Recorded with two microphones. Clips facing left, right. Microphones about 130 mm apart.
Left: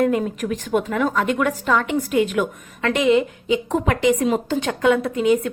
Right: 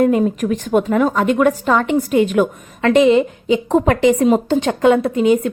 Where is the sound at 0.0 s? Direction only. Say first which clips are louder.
Right 5 dB; 25° right (ahead or behind).